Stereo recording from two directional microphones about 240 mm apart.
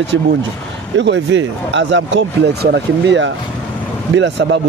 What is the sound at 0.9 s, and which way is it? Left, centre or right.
Speech, right.